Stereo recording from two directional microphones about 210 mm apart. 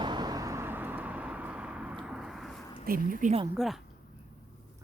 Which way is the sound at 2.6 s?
20° left (ahead or behind).